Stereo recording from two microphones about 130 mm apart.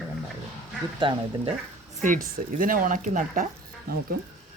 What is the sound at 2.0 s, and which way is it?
Speech, 90° right.